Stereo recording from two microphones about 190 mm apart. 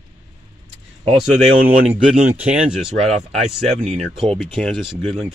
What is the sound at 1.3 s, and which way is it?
Speech, 40° right (ahead or behind).